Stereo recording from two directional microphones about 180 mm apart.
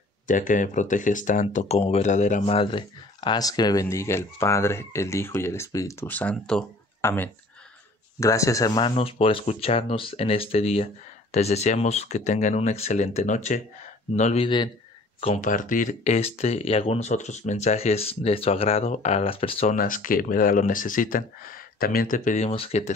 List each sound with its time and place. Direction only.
0.3 s speech: 45° left (ahead or behind); by 19.7 s 30° left (ahead or behind)
19.7 s speech: 45° left (ahead or behind)